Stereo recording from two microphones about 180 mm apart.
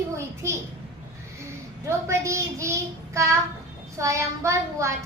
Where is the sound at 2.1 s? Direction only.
15° right (ahead or behind).